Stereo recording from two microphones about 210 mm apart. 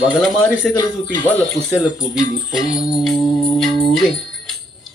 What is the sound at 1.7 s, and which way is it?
Speech, 5° right (ahead or behind).